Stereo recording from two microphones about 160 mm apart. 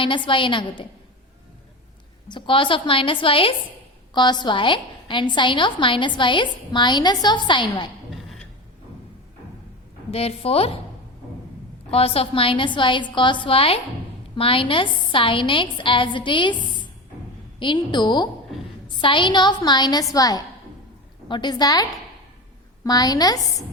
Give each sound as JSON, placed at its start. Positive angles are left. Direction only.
{"t": 0.0, "sound": "a woman's voice", "side_deg": 30}
{"t": 2.2, "sound": "a woman's voice", "side_deg": 30}
{"t": 10.1, "sound": "a woman's voice", "side_deg": 40}
{"t": 11.9, "sound": "a woman's voice", "side_deg": 40}